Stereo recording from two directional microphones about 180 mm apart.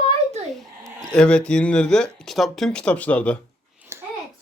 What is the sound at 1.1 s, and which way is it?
A man's voice, 5° left (ahead or behind).